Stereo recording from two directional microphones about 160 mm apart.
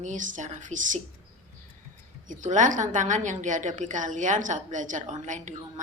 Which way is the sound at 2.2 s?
50° right (ahead or behind).